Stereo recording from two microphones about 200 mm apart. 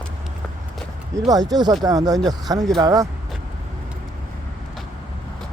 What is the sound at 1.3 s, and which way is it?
Speech, 20° right (ahead or behind).